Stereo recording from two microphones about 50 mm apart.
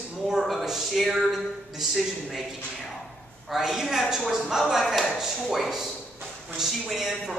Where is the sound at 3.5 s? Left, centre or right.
Centre.